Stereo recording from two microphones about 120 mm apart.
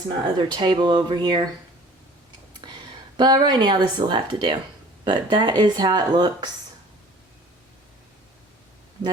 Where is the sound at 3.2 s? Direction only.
35° right (ahead or behind).